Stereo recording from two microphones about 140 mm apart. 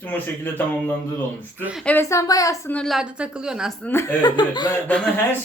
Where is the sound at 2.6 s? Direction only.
10° left (ahead or behind).